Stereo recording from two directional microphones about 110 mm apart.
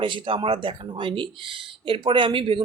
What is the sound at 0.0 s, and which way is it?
Speech, 50° right (ahead or behind).